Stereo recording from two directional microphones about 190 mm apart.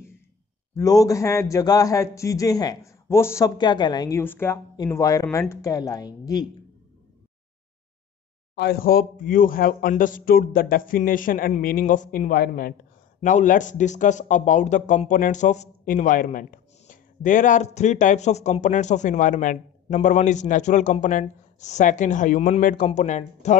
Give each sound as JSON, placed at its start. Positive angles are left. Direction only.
{"t": 0.7, "sound": "a man's voice", "side_deg": 15}
{"t": 8.5, "sound": "speech", "side_deg": 55}